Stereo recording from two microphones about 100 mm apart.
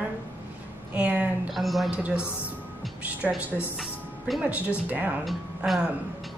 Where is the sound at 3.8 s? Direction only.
Centre (ahead or behind).